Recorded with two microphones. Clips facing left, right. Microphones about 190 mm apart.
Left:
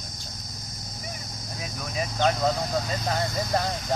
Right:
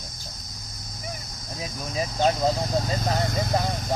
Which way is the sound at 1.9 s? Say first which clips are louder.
Right 2 dB; 30° right (ahead or behind).